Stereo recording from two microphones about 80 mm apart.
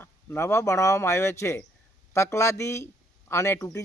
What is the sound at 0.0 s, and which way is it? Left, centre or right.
Speech, left.